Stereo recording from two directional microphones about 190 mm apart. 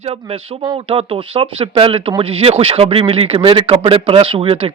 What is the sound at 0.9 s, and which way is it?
A man's voice, 30° right (ahead or behind).